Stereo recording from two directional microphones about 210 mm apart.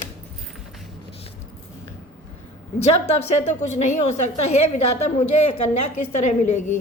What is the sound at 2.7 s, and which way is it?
A woman's voice, 30° left (ahead or behind).